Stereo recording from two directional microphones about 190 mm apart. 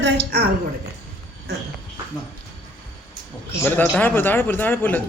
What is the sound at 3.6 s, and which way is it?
A man's voice, 10° left (ahead or behind).